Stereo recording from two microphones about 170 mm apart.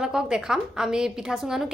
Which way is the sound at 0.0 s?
5° right (ahead or behind).